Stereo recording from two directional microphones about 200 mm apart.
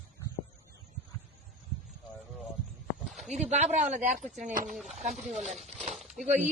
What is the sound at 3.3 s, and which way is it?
Speech, 35° right (ahead or behind).